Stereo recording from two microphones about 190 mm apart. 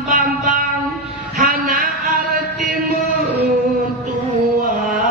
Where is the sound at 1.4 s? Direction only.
50° right (ahead or behind).